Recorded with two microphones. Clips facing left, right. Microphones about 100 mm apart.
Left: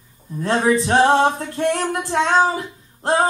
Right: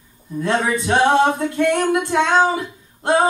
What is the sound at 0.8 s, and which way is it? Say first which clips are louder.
Female singing: right 2 dB; 35° left (ahead or behind).